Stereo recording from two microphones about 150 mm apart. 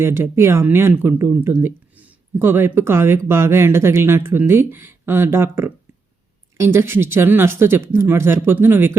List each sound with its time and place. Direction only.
0.0 s speech: 15° right (ahead or behind)